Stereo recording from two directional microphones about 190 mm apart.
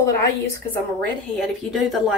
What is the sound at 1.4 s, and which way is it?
Speech, centre (ahead or behind).